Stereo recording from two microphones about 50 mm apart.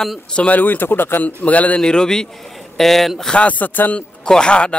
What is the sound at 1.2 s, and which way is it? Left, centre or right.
Speech, left.